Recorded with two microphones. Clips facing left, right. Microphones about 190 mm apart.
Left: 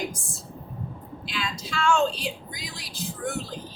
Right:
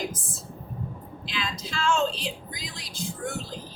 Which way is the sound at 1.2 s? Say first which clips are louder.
Even; centre (ahead or behind).